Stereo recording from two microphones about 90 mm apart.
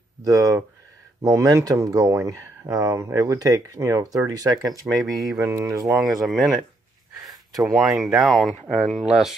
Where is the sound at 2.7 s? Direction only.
50° right (ahead or behind).